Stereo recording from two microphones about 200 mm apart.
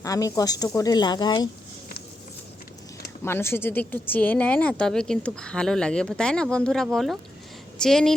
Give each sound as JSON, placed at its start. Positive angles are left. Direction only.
{"t": 0.0, "sound": "speech", "side_deg": 15}
{"t": 3.2, "sound": "speech", "side_deg": 10}